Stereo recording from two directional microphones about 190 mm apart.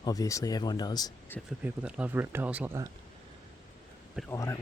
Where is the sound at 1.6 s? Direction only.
5° right (ahead or behind).